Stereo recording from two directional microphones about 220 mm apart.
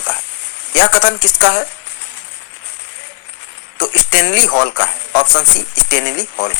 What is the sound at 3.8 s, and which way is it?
Speech, 55° left (ahead or behind).